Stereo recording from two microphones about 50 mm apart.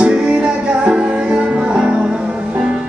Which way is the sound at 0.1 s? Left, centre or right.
Right.